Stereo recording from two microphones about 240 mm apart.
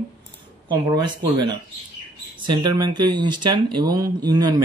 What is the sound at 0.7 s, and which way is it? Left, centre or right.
Speech, centre.